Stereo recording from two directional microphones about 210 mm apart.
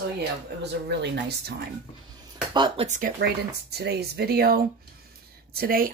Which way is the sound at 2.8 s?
35° right (ahead or behind).